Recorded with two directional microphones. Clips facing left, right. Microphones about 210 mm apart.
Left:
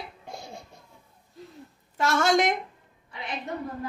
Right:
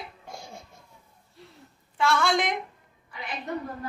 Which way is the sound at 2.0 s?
45° left (ahead or behind).